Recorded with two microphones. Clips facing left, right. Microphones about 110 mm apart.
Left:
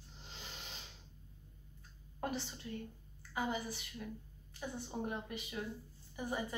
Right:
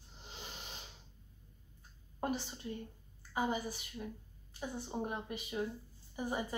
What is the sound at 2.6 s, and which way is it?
Speech, 25° right (ahead or behind).